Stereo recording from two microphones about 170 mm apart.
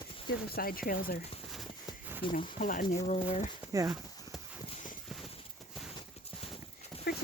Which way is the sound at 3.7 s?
20° right (ahead or behind).